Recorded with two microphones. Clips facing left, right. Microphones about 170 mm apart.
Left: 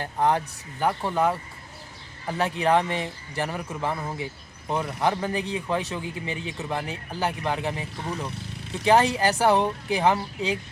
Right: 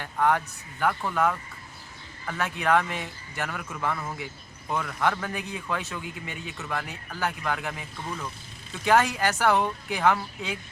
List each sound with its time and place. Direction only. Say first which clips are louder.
0.0 s a man's voice: left 1 dB; 30° left (ahead or behind)